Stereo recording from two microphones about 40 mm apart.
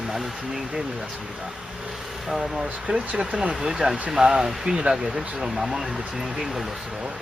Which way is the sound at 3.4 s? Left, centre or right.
Centre.